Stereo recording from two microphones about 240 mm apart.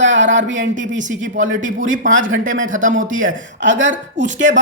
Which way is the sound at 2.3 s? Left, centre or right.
Right.